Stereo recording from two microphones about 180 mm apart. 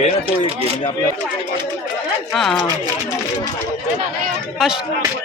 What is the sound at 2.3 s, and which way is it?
Speech, centre (ahead or behind).